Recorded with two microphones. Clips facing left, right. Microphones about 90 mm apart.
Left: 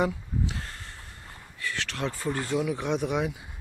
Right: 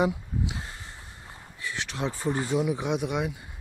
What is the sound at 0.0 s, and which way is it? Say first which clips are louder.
Speech: right 1 dB; 15° right (ahead or behind).